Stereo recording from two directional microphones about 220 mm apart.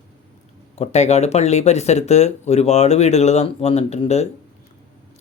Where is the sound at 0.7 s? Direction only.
30° left (ahead or behind).